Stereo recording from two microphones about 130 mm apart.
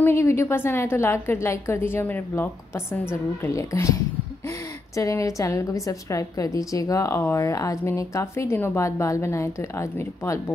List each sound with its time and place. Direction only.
0.0 s a woman's voice: 20° left (ahead or behind)